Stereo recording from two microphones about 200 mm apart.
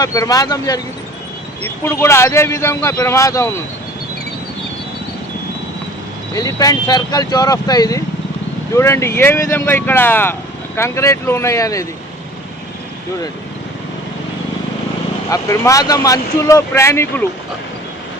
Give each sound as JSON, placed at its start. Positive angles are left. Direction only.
{"t": 0.0, "sound": "speech", "side_deg": 15}
{"t": 6.3, "sound": "speech", "side_deg": 20}
{"t": 15.3, "sound": "speech", "side_deg": 15}